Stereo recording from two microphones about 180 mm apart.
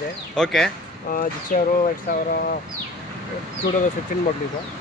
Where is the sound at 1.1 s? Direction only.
50° left (ahead or behind).